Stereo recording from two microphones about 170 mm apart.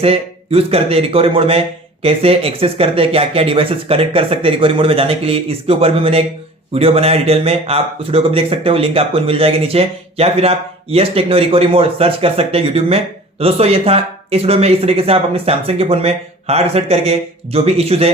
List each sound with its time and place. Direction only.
0.0 s speech: 35° right (ahead or behind)